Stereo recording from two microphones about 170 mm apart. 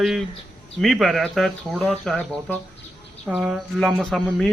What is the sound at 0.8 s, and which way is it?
Speech, centre (ahead or behind).